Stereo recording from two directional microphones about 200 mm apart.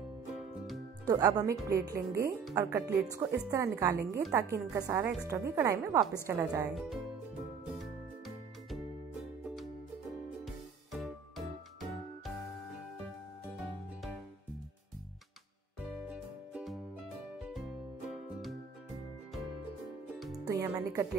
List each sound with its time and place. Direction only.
0.3 s music: centre (ahead or behind)
1.0 s speech: 20° right (ahead or behind)
6.7 s speech: centre (ahead or behind)
10.4 s music: centre (ahead or behind)
16.1 s music: 5° right (ahead or behind)
20.4 s music: 15° right (ahead or behind)